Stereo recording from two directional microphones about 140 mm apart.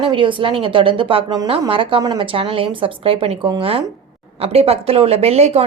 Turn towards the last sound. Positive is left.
turn(degrees=-50)  # may be behind; listen again after turning